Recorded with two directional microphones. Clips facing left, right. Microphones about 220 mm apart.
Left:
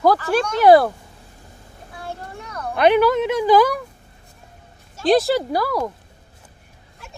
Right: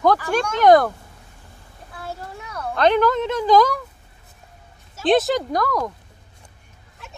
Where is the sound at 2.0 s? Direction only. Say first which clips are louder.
Even; 5° right (ahead or behind).